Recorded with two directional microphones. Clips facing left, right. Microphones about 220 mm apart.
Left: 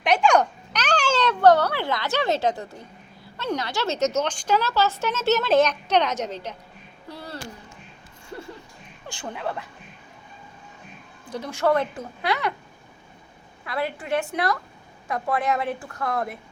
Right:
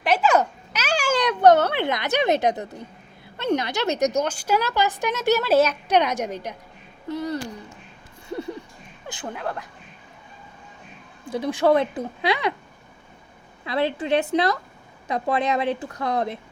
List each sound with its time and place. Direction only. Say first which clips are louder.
0.0 s a child's voice: even; 5° right (ahead or behind); by 7.3 s 20° right (ahead or behind)
9.2 s speech: even; centre (ahead or behind)
11.3 s a woman's voice: right 3 dB; 15° right (ahead or behind)
13.7 s speech: right 4 dB; 25° right (ahead or behind)